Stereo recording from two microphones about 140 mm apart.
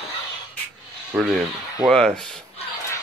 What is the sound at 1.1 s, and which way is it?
Speech, 10° right (ahead or behind).